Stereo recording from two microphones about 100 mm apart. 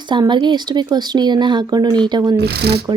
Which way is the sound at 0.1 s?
50° right (ahead or behind).